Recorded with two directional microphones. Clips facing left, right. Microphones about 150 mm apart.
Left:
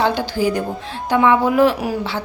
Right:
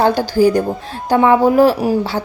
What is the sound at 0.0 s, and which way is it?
A woman's voice, 40° right (ahead or behind).